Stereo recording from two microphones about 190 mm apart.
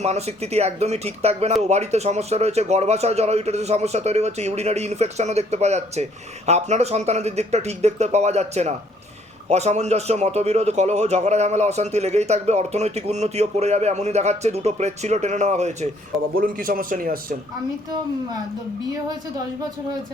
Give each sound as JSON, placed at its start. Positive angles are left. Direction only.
{"t": 0.0, "sound": "speech", "side_deg": -35}
{"t": 16.3, "sound": "speech", "side_deg": -50}